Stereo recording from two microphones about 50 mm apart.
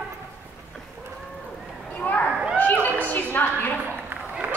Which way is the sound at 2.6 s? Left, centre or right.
Left.